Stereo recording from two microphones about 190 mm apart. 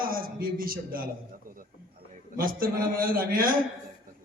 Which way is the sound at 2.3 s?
50° right (ahead or behind).